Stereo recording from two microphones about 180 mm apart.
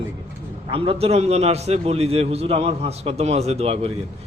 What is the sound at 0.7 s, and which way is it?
A man's voice, 30° right (ahead or behind).